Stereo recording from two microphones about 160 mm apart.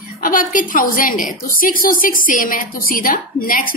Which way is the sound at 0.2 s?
60° left (ahead or behind).